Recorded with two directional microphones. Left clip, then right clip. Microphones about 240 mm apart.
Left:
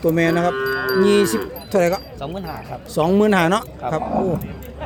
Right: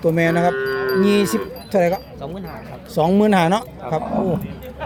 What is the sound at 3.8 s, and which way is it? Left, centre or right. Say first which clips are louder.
Speech: even; left.